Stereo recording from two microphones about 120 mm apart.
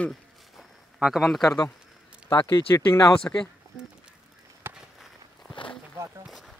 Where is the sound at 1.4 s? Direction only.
30° left (ahead or behind).